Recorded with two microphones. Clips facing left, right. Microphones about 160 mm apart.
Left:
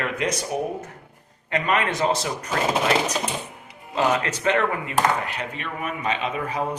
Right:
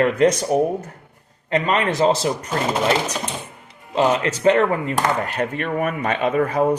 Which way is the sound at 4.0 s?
30° right (ahead or behind).